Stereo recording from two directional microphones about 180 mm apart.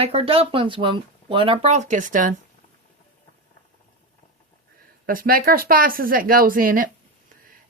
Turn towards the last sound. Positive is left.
turn(degrees=-50)  # may be behind; listen again after turning